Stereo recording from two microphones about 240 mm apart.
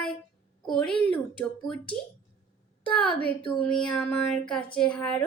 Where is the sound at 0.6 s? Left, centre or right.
Centre.